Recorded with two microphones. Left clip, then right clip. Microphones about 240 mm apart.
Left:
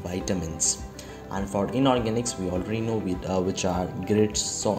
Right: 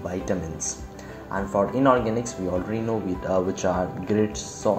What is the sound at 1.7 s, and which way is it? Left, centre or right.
Speech, left.